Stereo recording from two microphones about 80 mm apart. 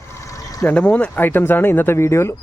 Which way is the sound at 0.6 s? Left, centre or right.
Centre.